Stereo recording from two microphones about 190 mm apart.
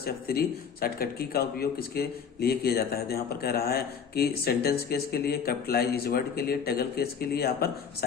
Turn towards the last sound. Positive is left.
turn(degrees=55)  # may be behind; listen again after turning